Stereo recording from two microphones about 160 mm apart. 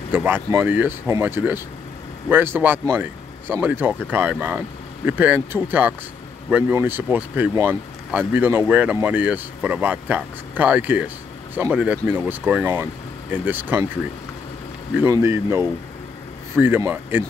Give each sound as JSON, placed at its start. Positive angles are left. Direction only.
{"t": 0.1, "sound": "speech", "side_deg": -10}
{"t": 15.0, "sound": "speech", "side_deg": -15}